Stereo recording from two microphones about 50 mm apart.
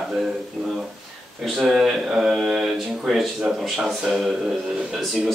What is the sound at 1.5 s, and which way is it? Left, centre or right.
Speech, centre.